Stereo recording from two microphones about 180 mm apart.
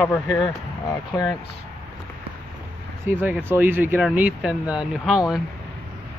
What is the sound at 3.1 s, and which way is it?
Speech, 10° right (ahead or behind).